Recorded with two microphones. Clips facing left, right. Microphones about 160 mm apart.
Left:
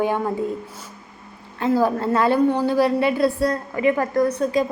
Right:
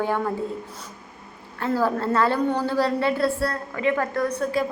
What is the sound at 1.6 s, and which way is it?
A woman's voice, 15° left (ahead or behind).